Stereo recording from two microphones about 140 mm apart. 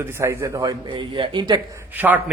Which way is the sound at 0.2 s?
25° right (ahead or behind).